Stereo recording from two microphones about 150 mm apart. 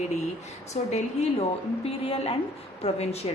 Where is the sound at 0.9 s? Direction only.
45° left (ahead or behind).